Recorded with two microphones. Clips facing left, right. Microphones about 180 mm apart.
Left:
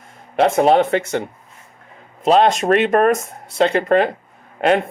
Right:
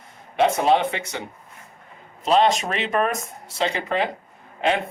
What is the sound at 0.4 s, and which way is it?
Speech, 50° left (ahead or behind).